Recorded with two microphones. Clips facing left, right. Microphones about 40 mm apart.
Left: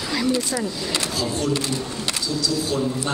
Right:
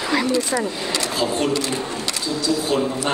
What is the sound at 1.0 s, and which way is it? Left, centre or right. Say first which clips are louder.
Drawer open or close: right 4 dB; right.